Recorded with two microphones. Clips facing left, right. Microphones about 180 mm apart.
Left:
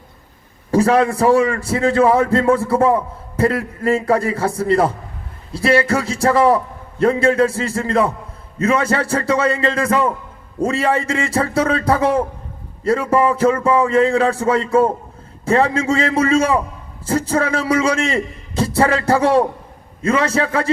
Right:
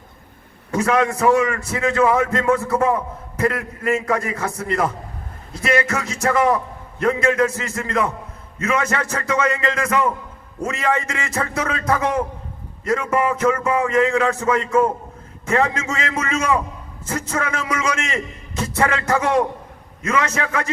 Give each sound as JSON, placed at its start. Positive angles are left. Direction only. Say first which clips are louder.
{"t": 0.7, "sound": "a man's voice", "louder": "left 5 dB", "side_deg": 35}